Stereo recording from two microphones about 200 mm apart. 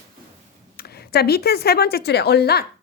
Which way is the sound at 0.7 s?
50° left (ahead or behind).